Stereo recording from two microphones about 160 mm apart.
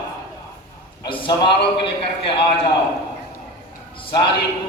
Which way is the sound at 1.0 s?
30° left (ahead or behind).